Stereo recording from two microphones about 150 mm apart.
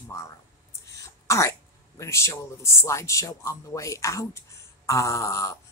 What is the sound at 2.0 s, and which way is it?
A man's voice, 20° left (ahead or behind).